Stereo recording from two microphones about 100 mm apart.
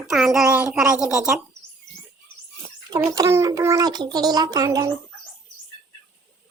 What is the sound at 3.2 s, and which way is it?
A child's voice, 25° right (ahead or behind).